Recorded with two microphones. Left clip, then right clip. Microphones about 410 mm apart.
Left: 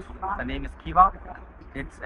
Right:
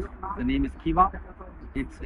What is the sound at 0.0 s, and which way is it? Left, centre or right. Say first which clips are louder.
Speech: left 2 dB; centre.